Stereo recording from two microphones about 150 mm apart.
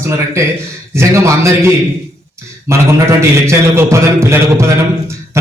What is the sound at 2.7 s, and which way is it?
A man's voice, 20° right (ahead or behind).